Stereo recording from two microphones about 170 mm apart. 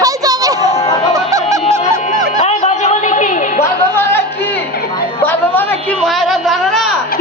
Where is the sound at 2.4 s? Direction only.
40° left (ahead or behind).